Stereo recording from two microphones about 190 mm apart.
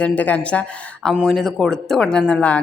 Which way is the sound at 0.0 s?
5° left (ahead or behind).